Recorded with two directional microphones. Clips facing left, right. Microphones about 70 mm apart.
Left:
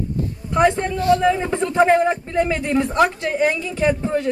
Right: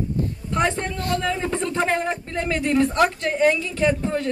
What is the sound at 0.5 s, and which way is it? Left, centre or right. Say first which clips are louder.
A woman's voice: left 7 dB; centre.